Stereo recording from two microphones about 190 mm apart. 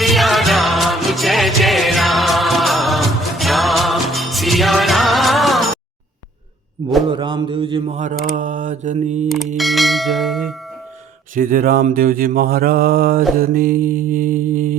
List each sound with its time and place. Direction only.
0.0 s music: centre (ahead or behind)
7.1 s mantra: 25° right (ahead or behind)
9.6 s church bell: centre (ahead or behind)
11.3 s mantra: 45° right (ahead or behind)